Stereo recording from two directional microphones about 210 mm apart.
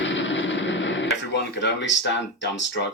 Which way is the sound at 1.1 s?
55° left (ahead or behind).